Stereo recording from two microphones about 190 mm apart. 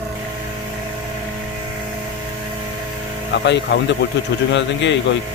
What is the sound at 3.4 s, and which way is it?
Speech, 65° left (ahead or behind).